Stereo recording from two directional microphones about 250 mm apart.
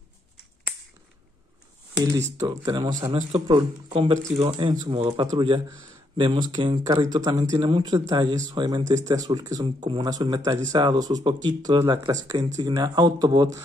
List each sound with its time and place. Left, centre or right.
2.3 s speech: centre